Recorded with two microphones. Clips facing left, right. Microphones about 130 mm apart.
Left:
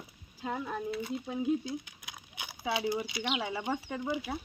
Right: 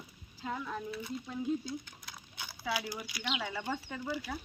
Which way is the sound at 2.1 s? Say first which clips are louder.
Left 2 dB; 15° left (ahead or behind).